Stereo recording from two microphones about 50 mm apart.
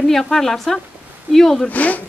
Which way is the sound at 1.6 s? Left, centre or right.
Left.